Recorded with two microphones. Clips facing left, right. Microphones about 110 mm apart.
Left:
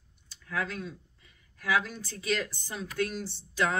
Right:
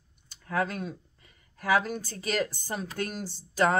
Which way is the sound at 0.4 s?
45° right (ahead or behind).